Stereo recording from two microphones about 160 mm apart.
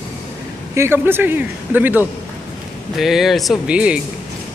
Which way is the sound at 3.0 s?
Centre (ahead or behind).